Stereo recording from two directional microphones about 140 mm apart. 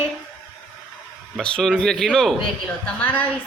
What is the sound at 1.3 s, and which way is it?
A woman's voice, 5° left (ahead or behind).